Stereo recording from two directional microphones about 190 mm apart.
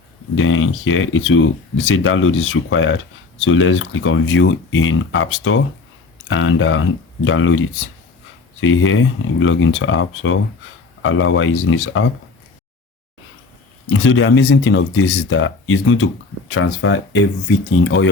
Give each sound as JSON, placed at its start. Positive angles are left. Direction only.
{"t": 0.3, "sound": "speech", "side_deg": 90}
{"t": 8.6, "sound": "speech", "side_deg": 90}
{"t": 13.9, "sound": "speech", "side_deg": 90}